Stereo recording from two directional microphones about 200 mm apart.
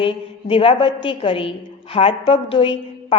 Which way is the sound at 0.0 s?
25° left (ahead or behind).